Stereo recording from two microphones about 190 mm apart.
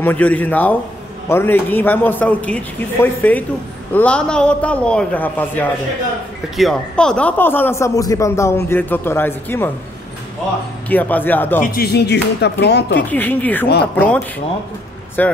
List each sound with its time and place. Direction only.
0.0 s speech: 10° left (ahead or behind)
10.9 s speech: 10° left (ahead or behind)
11.6 s speech: 55° left (ahead or behind)
13.1 s speech: 10° left (ahead or behind)